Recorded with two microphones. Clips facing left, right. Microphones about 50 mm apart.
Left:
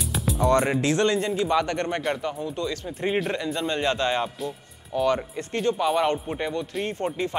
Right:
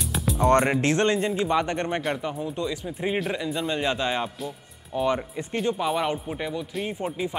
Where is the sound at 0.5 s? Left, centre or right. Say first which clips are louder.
Right 1 dB; right; by 2.7 s centre.